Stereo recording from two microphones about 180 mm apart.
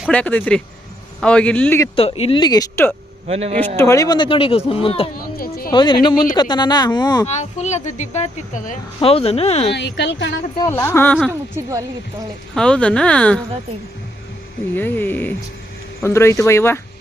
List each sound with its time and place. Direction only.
0.1 s speech: 10° left (ahead or behind)
2.0 s speech: 35° left (ahead or behind); by 2.9 s 15° left (ahead or behind)
3.2 s a man's voice: 35° right (ahead or behind)
3.8 s speech: 15° left (ahead or behind); by 5.0 s 30° left (ahead or behind)
5.1 s a sound: 55° left (ahead or behind)
5.7 s speech: 25° left (ahead or behind)
7.3 s speech: 40° left (ahead or behind)
9.0 s speech: 30° left (ahead or behind)
9.7 s speech: 75° left (ahead or behind)
10.6 s speech: 15° left (ahead or behind)
11.3 s a woman's voice: 15° right (ahead or behind)
12.5 s speech: 5° left (ahead or behind)
14.8 s speech: 10° left (ahead or behind)